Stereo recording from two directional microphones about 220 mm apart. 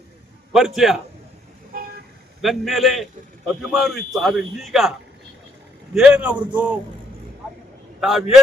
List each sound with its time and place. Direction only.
0.5 s a man's voice: centre (ahead or behind)
1.7 s vehicle: 40° right (ahead or behind)
2.4 s a man's voice: centre (ahead or behind)
8.0 s a man's voice: centre (ahead or behind)